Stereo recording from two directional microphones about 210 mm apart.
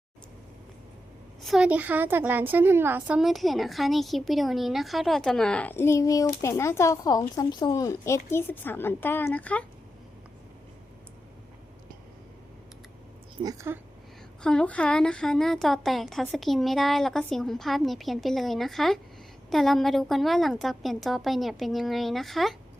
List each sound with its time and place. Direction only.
1.5 s a woman's voice: 5° right (ahead or behind)
13.4 s a woman's voice: 15° right (ahead or behind)
14.4 s a woman's voice: 5° left (ahead or behind)